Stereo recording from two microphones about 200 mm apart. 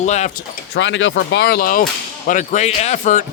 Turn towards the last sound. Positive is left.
turn(degrees=35)  # may be behind; listen again after turning